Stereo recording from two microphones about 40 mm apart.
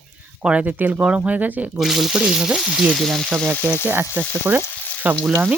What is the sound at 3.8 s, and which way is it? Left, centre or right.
Speech, right.